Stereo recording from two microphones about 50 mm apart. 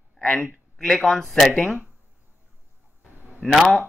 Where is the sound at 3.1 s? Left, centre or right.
Right.